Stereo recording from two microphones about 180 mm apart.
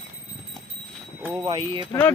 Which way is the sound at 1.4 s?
30° right (ahead or behind).